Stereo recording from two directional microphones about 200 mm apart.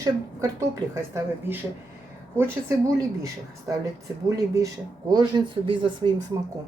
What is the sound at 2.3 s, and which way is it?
Speech, 10° right (ahead or behind).